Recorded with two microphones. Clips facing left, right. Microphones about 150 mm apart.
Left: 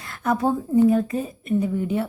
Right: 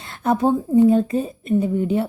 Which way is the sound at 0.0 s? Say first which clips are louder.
Right 3 dB; 25° right (ahead or behind).